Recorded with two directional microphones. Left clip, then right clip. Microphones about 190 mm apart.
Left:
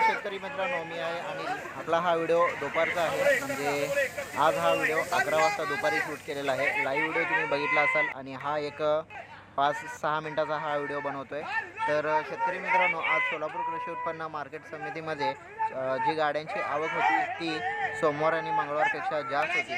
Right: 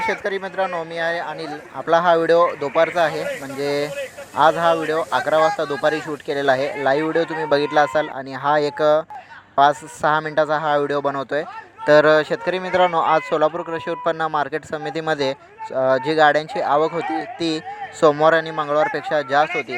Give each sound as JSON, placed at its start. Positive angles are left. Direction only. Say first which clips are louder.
{"t": 0.3, "sound": "speech", "louder": "right 9 dB", "side_deg": -30}